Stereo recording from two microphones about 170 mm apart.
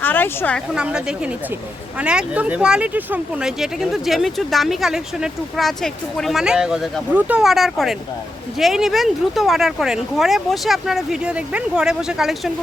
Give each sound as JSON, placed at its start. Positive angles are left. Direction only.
{"t": 0.0, "sound": "a woman's voice", "side_deg": 10}
{"t": 0.8, "sound": "speech", "side_deg": -5}